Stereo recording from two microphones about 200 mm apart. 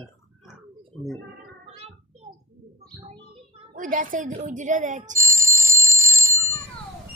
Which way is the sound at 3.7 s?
40° right (ahead or behind).